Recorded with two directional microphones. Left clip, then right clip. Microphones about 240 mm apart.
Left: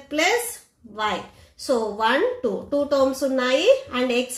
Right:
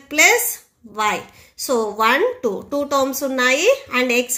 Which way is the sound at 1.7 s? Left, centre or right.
Right.